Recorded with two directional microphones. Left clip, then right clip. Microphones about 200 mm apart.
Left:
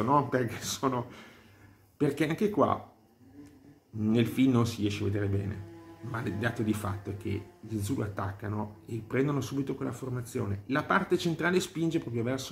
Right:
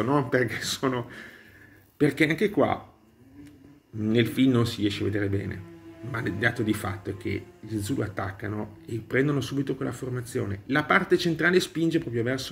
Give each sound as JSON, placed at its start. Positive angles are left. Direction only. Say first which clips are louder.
{"t": 0.1, "sound": "speech", "louder": "right 1 dB", "side_deg": -5}
{"t": 4.0, "sound": "speech", "louder": "right 4 dB", "side_deg": -5}
{"t": 7.8, "sound": "speech", "louder": "right 4 dB", "side_deg": -5}
{"t": 9.8, "sound": "speech", "louder": "right 4 dB", "side_deg": -25}
{"t": 10.3, "sound": "speech", "louder": "right 5 dB", "side_deg": -10}